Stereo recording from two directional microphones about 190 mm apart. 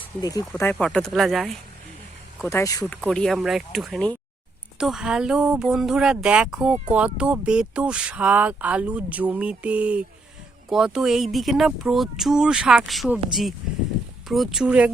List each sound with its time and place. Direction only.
0.2 s speech: 20° left (ahead or behind)
0.5 s speech: 5° left (ahead or behind)
2.4 s speech: 15° left (ahead or behind)
3.0 s speech: centre (ahead or behind)